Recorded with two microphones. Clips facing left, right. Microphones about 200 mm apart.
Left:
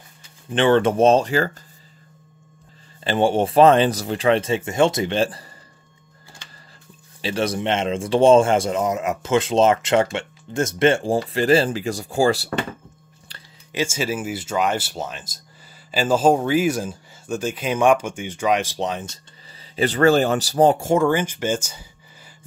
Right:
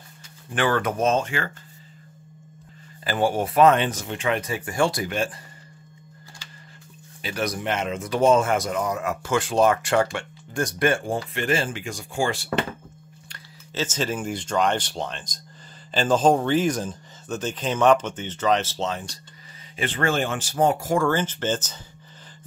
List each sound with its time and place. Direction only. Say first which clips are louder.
0.5 s speech: left 7 dB; 25° left (ahead or behind)
3.0 s speech: left 4 dB; 25° left (ahead or behind)
7.2 s speech: left 5 dB; 30° left (ahead or behind)
13.7 s speech: left 3 dB; 10° left (ahead or behind)
19.7 s speech: left 8 dB; 40° left (ahead or behind); by 21.8 s 10° left (ahead or behind)